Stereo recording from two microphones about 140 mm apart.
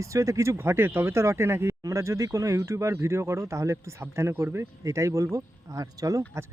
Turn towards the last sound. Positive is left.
turn(degrees=-25)  # may be behind; listen again after turning